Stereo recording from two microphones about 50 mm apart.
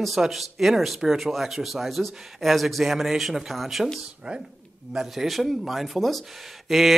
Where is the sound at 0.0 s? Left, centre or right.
Centre.